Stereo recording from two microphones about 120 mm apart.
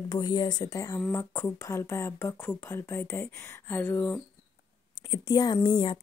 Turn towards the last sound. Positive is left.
turn(degrees=40)  # may be behind; listen again after turning